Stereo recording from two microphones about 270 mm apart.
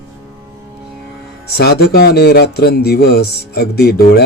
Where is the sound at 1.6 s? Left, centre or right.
Left.